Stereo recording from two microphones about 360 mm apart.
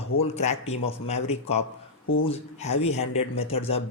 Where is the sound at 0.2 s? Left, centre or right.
Centre.